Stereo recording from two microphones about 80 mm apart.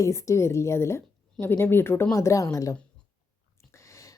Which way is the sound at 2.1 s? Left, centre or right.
Left.